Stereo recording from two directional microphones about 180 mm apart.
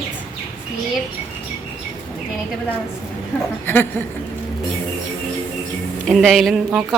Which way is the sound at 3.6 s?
10° left (ahead or behind).